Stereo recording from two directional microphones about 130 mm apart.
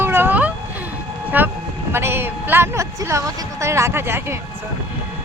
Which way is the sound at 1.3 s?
15° right (ahead or behind).